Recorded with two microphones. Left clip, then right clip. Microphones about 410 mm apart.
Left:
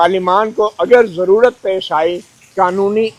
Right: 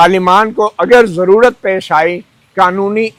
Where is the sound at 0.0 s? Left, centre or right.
Right.